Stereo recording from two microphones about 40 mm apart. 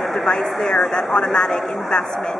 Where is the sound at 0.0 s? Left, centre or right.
Centre.